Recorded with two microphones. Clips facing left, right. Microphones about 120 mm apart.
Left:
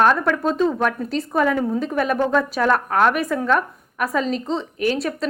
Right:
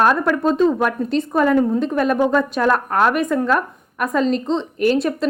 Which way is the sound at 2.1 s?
10° right (ahead or behind).